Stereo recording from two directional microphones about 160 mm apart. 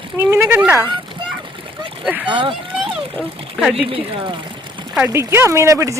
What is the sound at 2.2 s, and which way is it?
Speech, 30° right (ahead or behind).